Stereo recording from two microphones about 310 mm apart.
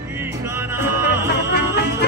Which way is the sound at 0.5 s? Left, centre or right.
Centre.